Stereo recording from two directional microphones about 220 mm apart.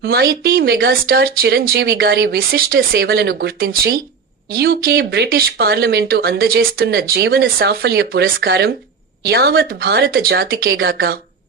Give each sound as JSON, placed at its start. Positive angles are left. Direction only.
{"t": 0.0, "sound": "speech", "side_deg": -45}